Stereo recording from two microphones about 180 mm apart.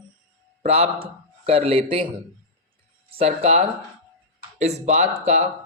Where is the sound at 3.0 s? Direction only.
35° right (ahead or behind).